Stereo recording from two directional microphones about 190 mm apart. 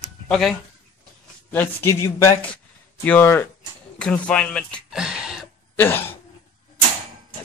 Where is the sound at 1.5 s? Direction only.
10° left (ahead or behind); by 5.5 s 5° right (ahead or behind).